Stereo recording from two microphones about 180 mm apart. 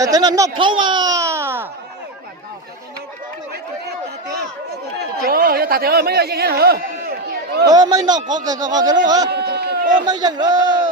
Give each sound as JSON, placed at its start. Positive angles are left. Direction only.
{"t": 0.0, "sound": "speech", "side_deg": -20}
{"t": 5.2, "sound": "speech", "side_deg": -55}
{"t": 7.7, "sound": "speech", "side_deg": -20}
{"t": 9.3, "sound": "speech", "side_deg": -60}
{"t": 10.1, "sound": "speech", "side_deg": -25}